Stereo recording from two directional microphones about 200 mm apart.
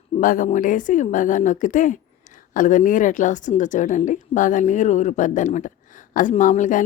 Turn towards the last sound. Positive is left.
turn(degrees=40)  # may be behind; listen again after turning